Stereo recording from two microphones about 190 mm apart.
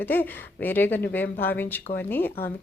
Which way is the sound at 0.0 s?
10° left (ahead or behind).